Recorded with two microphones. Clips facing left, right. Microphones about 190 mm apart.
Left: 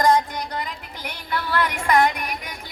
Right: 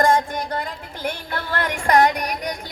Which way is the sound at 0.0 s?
50° right (ahead or behind).